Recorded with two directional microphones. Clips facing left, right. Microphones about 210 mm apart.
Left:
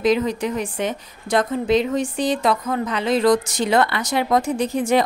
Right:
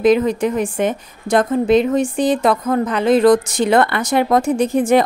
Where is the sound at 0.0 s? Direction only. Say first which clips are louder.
Right 5 dB; 55° right (ahead or behind).